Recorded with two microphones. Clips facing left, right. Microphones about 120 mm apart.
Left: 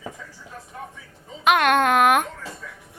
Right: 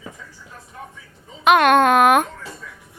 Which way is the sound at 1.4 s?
25° right (ahead or behind).